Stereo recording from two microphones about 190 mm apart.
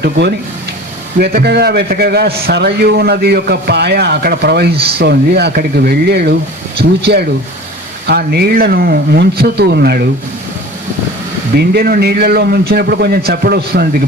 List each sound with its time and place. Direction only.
0.0 s a man's voice: 60° right (ahead or behind)
11.5 s a man's voice: 55° right (ahead or behind)